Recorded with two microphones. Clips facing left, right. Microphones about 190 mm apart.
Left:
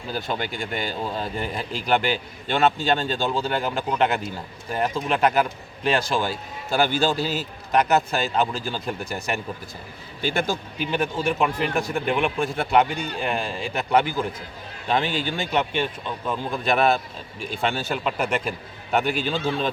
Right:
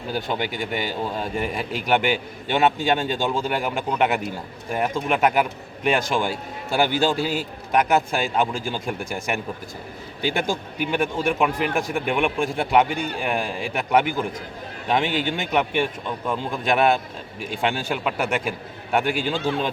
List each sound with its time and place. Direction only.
0.1 s a man's voice: 15° right (ahead or behind)